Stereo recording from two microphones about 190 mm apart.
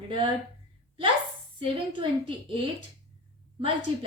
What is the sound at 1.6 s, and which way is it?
Speech, 25° right (ahead or behind).